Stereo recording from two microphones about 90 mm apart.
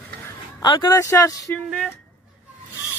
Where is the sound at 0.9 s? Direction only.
35° left (ahead or behind).